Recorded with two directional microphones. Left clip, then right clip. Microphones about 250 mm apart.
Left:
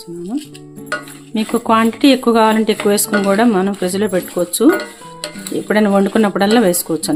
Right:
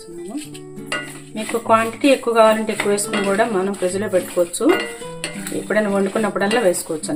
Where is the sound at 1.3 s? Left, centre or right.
Left.